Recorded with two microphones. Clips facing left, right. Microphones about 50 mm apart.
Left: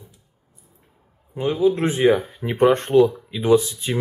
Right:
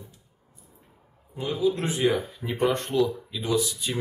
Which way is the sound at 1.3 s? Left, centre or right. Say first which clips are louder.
Left 6 dB; left.